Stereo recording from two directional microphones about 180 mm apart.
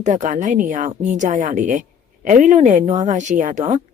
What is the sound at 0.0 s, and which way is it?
A woman's voice, 45° right (ahead or behind).